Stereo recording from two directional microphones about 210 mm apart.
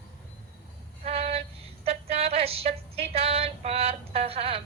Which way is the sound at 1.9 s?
30° right (ahead or behind).